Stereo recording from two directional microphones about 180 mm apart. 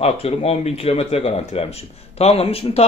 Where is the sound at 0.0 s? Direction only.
35° left (ahead or behind).